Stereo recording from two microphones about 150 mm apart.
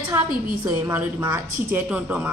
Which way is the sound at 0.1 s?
15° right (ahead or behind).